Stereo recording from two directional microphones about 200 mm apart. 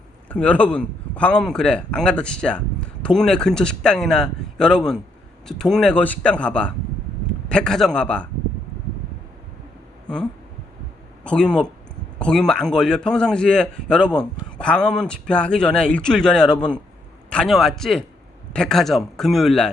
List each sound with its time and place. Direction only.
0.3 s a man's voice: 5° left (ahead or behind)
11.2 s a man's voice: 5° left (ahead or behind)